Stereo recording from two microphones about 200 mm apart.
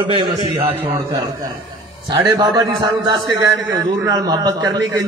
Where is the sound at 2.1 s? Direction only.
15° right (ahead or behind).